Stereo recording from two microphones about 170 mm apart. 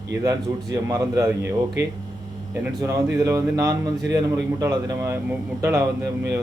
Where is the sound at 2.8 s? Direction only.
20° right (ahead or behind).